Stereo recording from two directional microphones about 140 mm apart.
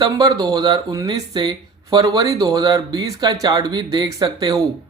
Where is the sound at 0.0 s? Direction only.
30° right (ahead or behind).